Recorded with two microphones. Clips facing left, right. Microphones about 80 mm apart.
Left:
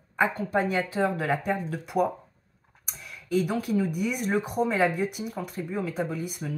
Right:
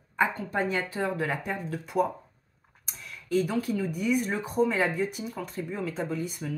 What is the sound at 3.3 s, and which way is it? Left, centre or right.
Speech, centre.